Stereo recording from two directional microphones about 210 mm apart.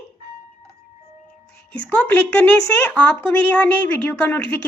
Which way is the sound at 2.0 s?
10° left (ahead or behind).